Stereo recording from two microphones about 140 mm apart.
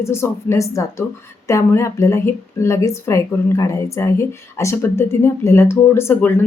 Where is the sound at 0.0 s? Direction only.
20° left (ahead or behind).